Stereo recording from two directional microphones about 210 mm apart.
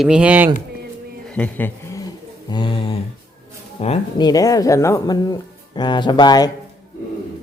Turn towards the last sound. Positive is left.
turn(degrees=20)  # may be behind; listen again after turning